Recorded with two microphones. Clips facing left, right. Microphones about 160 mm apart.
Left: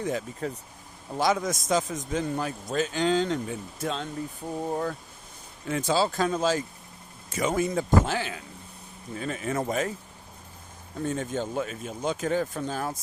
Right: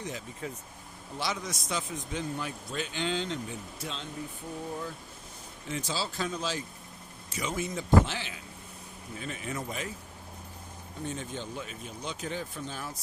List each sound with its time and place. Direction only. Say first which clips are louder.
0.0 s a man's voice: left 8 dB; 50° left (ahead or behind)
4.7 s a man's voice: left 8 dB; 60° left (ahead or behind)
11.0 s a man's voice: left 8 dB; 50° left (ahead or behind)